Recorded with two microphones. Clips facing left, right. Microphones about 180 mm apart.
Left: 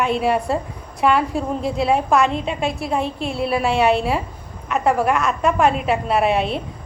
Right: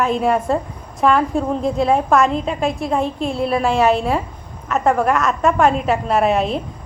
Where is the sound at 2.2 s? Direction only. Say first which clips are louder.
Right 2 dB; 40° right (ahead or behind).